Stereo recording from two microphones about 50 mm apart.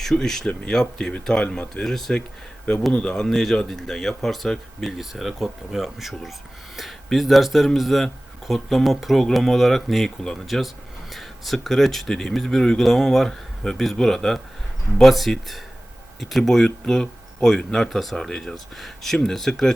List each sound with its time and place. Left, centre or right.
0.0 s speech: centre
2.9 s speech: left
3.2 s speech: centre
16.4 s speech: centre